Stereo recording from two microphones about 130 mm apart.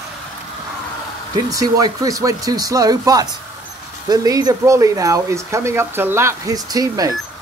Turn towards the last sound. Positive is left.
turn(degrees=-30)  # may be behind; listen again after turning